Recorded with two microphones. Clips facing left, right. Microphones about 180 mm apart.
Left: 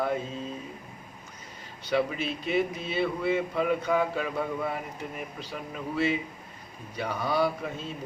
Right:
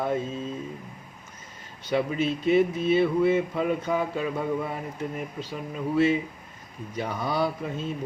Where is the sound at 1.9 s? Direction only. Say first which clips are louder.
Right 2 dB; 20° right (ahead or behind).